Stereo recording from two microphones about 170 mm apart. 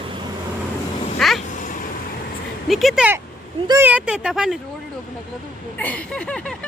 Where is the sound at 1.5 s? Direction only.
50° left (ahead or behind).